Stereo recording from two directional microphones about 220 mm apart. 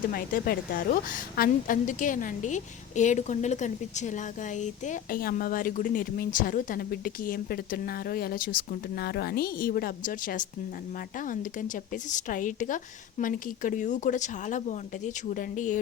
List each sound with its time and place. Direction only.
0.1 s a woman's voice: 45° left (ahead or behind)